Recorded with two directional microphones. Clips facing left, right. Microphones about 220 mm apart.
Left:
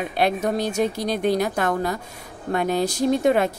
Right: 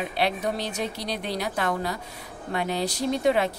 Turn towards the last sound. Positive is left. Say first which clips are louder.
# left 4 dB
turn(degrees=50)  # may be behind; listen again after turning